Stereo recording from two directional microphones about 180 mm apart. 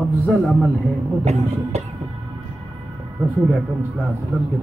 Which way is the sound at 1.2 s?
40° right (ahead or behind).